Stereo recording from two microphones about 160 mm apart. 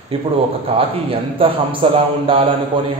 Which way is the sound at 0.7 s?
35° right (ahead or behind).